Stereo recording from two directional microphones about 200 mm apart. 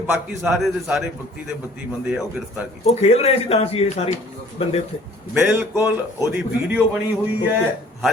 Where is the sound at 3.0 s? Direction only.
30° left (ahead or behind).